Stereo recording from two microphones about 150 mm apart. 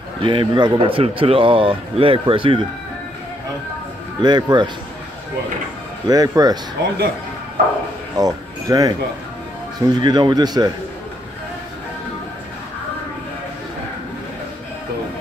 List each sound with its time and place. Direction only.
0.2 s speech: 35° right (ahead or behind)
4.2 s speech: 30° right (ahead or behind)
6.0 s speech: 25° right (ahead or behind)
7.6 s speech: 85° right
8.2 s speech: 25° right (ahead or behind)